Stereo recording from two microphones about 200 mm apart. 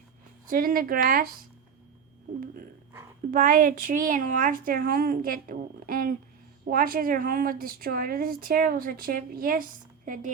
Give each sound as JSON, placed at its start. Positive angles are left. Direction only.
{"t": 0.4, "sound": "a woman's voice", "side_deg": -45}
{"t": 3.3, "sound": "a woman's voice", "side_deg": -40}